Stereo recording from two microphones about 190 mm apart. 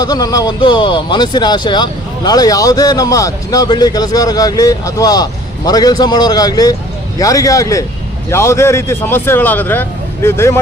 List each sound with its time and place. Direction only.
0.0 s speech: 20° left (ahead or behind)